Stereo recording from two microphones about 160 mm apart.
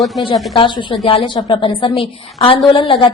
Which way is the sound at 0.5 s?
30° left (ahead or behind).